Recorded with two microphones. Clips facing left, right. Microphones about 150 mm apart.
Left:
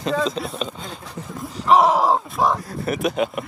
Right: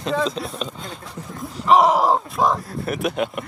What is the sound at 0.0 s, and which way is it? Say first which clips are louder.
Speech: even; centre (ahead or behind).